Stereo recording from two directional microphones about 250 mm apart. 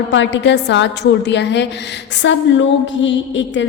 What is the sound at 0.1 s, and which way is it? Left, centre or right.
A woman's voice, left.